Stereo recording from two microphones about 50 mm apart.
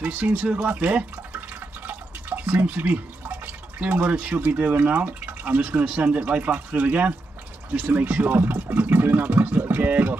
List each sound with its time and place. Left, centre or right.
0.0 s speech: right